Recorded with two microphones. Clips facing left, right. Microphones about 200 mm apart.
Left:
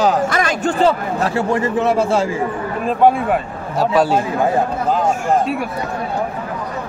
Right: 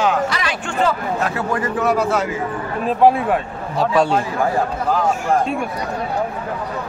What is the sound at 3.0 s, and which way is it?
A man's voice, centre (ahead or behind).